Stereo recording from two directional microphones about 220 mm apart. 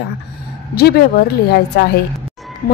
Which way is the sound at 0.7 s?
45° left (ahead or behind).